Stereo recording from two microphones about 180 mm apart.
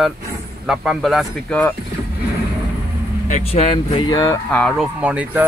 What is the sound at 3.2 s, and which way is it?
Speech, 35° left (ahead or behind).